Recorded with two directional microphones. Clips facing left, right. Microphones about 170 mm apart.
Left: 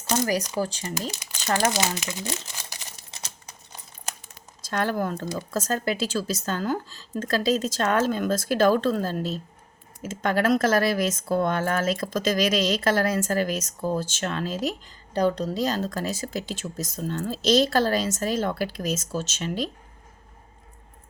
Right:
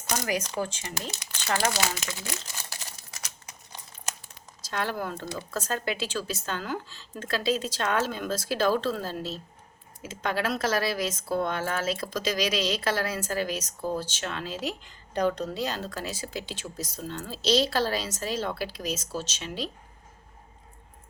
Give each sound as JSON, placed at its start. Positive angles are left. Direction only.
{"t": 0.1, "sound": "speech", "side_deg": 35}
{"t": 1.5, "sound": "crumpling", "side_deg": 20}
{"t": 4.6, "sound": "speech", "side_deg": 45}